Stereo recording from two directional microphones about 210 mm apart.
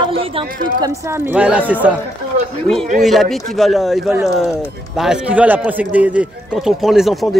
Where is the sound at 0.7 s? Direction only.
15° right (ahead or behind).